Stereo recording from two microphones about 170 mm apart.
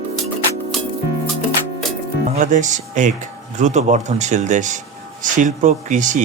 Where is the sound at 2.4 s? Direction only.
45° right (ahead or behind).